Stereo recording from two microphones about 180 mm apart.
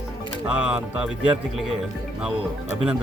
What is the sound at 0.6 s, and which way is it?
Speech, 5° right (ahead or behind).